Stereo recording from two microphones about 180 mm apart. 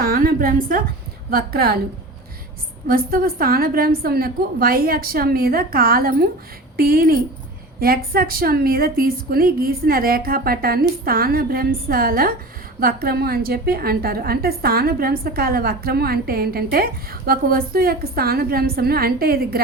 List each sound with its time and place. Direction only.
0.0 s a woman's voice: 55° right (ahead or behind)
2.8 s a woman's voice: 55° right (ahead or behind)